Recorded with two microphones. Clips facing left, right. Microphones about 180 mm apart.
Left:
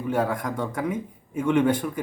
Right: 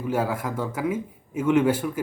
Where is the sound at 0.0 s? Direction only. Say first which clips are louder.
Left 1 dB; 5° right (ahead or behind).